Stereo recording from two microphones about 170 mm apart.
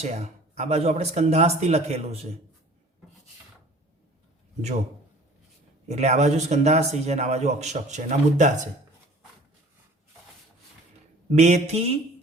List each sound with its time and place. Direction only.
0.0 s a man's voice: 40° right (ahead or behind)
5.9 s a man's voice: 40° right (ahead or behind)
11.3 s a man's voice: 40° right (ahead or behind)